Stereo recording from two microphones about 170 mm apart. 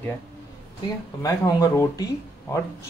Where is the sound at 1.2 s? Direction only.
20° left (ahead or behind).